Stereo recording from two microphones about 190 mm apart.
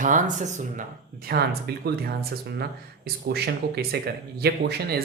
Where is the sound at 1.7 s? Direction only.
55° right (ahead or behind).